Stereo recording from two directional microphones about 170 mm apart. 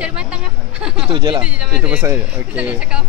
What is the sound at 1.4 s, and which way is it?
Speech, 5° right (ahead or behind).